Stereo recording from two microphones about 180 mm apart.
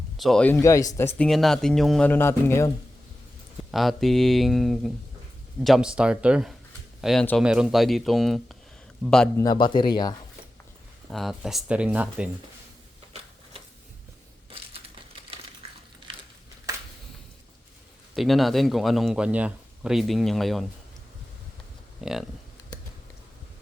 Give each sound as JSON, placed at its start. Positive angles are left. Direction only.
{"t": 0.2, "sound": "speech", "side_deg": 5}
{"t": 1.3, "sound": "speech", "side_deg": 0}
{"t": 3.7, "sound": "speech", "side_deg": 0}
{"t": 9.3, "sound": "speech", "side_deg": 20}
{"t": 11.1, "sound": "speech", "side_deg": 0}
{"t": 18.1, "sound": "speech", "side_deg": 0}
{"t": 22.0, "sound": "speech", "side_deg": 0}